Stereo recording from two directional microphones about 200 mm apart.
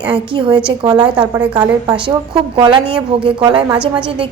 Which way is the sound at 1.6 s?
20° right (ahead or behind).